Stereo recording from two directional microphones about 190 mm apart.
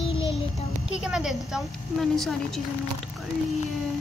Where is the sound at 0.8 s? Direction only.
5° right (ahead or behind).